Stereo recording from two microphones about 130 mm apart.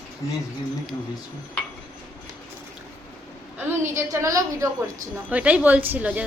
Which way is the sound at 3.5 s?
15° right (ahead or behind).